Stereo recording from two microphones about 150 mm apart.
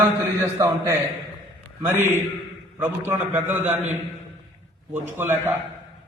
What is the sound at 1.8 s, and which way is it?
A man's voice, 15° right (ahead or behind).